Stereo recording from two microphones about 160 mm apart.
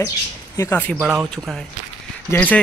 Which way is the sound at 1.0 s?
5° right (ahead or behind).